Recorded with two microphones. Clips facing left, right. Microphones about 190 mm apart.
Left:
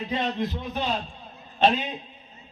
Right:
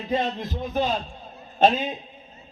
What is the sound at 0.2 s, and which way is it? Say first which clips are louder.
Speech: even; 45° right (ahead or behind).